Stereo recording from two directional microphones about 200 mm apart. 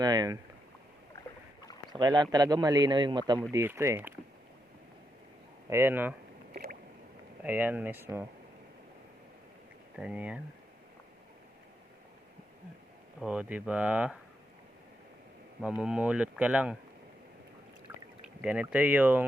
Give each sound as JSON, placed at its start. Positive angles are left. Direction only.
{"t": 0.0, "sound": "speech", "side_deg": -20}
{"t": 1.9, "sound": "a man's voice", "side_deg": -20}
{"t": 5.6, "sound": "speech", "side_deg": -10}
{"t": 7.4, "sound": "speech", "side_deg": -10}
{"t": 9.9, "sound": "speech", "side_deg": -5}
{"t": 13.1, "sound": "speech", "side_deg": -5}
{"t": 15.6, "sound": "speech", "side_deg": -5}
{"t": 18.4, "sound": "speech", "side_deg": -5}